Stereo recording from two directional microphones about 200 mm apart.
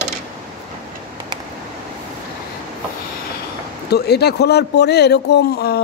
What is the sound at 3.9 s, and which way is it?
A man's voice, 55° left (ahead or behind).